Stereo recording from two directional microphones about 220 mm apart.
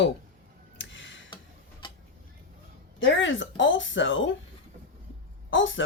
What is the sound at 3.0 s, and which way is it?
A woman's voice, 60° left (ahead or behind).